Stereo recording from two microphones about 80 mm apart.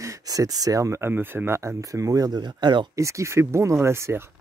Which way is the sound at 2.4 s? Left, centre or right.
Right.